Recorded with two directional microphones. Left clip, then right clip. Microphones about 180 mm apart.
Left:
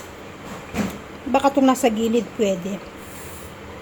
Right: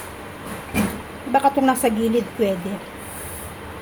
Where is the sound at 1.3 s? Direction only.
20° left (ahead or behind).